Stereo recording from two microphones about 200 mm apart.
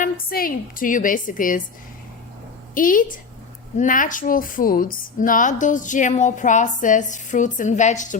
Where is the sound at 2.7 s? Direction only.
45° left (ahead or behind).